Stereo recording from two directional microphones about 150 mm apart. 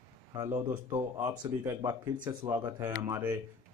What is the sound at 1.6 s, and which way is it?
Speech, 25° right (ahead or behind).